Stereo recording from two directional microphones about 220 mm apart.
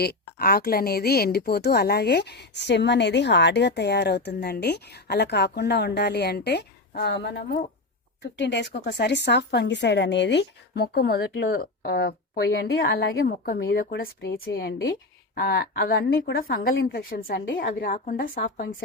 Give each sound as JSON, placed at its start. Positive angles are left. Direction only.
{"t": 0.0, "sound": "a woman's voice", "side_deg": 45}